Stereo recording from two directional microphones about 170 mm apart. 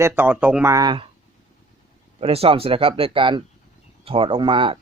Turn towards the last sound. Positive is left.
turn(degrees=-30)  # may be behind; listen again after turning